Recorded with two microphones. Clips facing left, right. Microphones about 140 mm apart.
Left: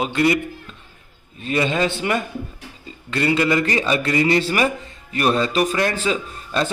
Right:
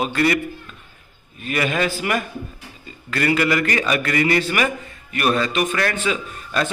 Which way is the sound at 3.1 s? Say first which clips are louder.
Left 1 dB; 25° left (ahead or behind).